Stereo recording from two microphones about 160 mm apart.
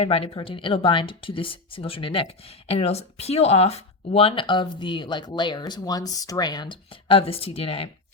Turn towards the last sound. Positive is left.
turn(degrees=35)  # may be behind; listen again after turning